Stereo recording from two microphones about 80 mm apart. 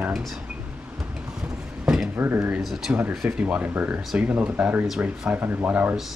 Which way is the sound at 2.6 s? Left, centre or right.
Centre.